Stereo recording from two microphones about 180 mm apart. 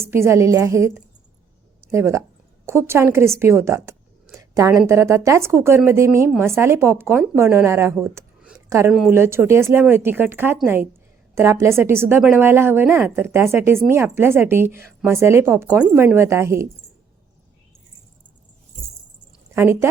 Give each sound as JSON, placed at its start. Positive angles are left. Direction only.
{"t": 0.1, "sound": "a woman's voice", "side_deg": -15}
{"t": 8.5, "sound": "a sound", "side_deg": -15}
{"t": 8.9, "sound": "speech", "side_deg": -5}
{"t": 19.5, "sound": "speech", "side_deg": -15}